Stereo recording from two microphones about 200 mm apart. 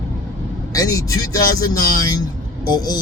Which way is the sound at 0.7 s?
15° left (ahead or behind).